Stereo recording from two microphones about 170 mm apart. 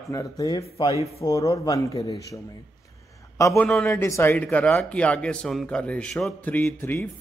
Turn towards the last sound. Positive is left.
turn(degrees=15)  # may be behind; listen again after turning